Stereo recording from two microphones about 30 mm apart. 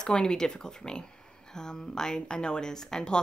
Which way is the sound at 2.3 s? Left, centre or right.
Left.